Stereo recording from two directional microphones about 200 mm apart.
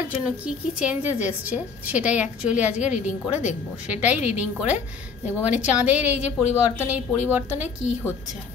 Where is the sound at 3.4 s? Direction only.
35° left (ahead or behind).